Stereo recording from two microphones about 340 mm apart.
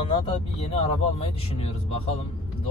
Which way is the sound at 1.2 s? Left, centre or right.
Centre.